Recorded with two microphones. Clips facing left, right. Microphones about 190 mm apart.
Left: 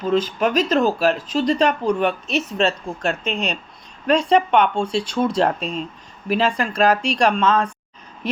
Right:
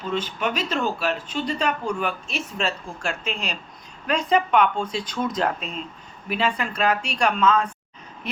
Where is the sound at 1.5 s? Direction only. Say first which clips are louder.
Left 6 dB; 35° left (ahead or behind).